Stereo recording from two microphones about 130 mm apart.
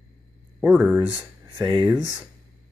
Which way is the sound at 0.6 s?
15° right (ahead or behind).